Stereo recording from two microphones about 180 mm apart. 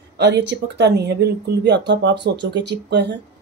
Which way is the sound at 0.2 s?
70° right (ahead or behind).